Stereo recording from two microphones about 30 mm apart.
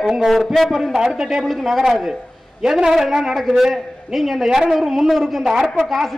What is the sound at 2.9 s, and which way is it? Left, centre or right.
A man's voice, centre.